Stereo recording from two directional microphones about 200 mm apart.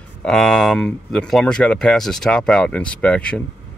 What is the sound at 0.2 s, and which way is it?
Speech, 5° left (ahead or behind).